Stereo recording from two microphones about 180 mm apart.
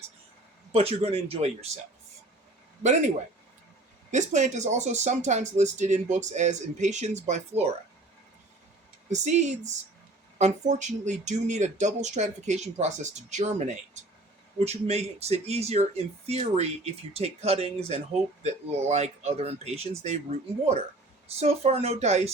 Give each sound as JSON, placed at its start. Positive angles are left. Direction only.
{"t": 0.7, "sound": "speech", "side_deg": -35}
{"t": 4.1, "sound": "speech", "side_deg": -40}
{"t": 9.0, "sound": "speech", "side_deg": -40}
{"t": 21.3, "sound": "speech", "side_deg": -35}